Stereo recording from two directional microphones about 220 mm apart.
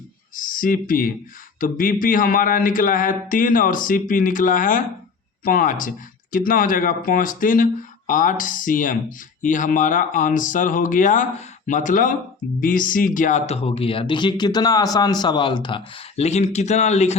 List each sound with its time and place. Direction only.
0.3 s speech: 40° left (ahead or behind)